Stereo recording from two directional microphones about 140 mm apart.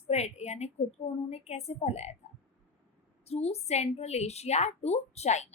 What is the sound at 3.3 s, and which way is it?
A woman's voice, 50° left (ahead or behind).